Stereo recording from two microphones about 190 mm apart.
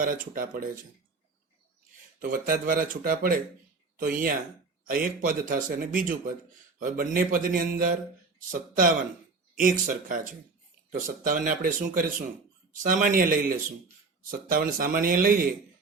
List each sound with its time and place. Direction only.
0.0 s speech: 50° right (ahead or behind)
2.1 s speech: 50° right (ahead or behind)